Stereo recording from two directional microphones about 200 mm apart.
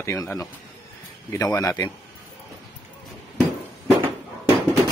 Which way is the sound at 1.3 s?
15° left (ahead or behind).